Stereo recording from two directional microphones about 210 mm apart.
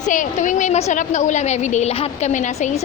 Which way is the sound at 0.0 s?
35° left (ahead or behind).